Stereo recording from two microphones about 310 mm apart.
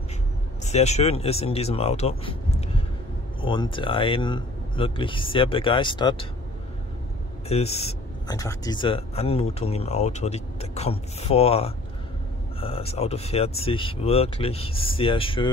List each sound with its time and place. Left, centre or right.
0.7 s speech: left
7.4 s speech: centre